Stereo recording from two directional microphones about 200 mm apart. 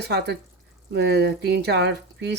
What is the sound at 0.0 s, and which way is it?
Speech, 55° right (ahead or behind).